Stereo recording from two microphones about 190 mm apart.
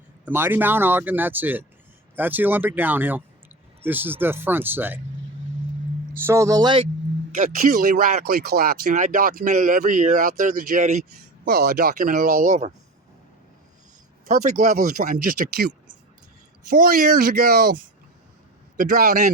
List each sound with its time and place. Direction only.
0.3 s speech: 10° right (ahead or behind)
6.2 s speech: 15° right (ahead or behind)
7.3 s speech: 40° right (ahead or behind)
11.4 s speech: 55° right (ahead or behind); by 12.7 s 35° right (ahead or behind)
14.3 s speech: 40° right (ahead or behind); by 15.7 s 55° right (ahead or behind)
16.6 s speech: 45° right (ahead or behind)
18.8 s a man's voice: 45° right (ahead or behind)